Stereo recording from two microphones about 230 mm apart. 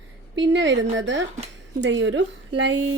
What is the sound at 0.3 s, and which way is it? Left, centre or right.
Speech, right.